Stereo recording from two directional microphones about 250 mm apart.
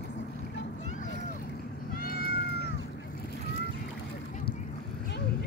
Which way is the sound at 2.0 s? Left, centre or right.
Left.